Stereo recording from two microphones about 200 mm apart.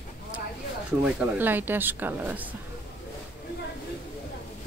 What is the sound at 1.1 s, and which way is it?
Speech, 10° right (ahead or behind).